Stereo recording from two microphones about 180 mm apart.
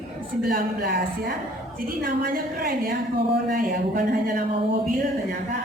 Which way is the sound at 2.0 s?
55° right (ahead or behind).